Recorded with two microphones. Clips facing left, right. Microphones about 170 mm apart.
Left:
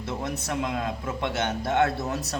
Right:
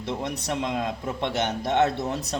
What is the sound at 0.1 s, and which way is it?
Speech, 20° right (ahead or behind).